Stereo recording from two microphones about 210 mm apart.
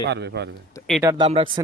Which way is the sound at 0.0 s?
55° right (ahead or behind).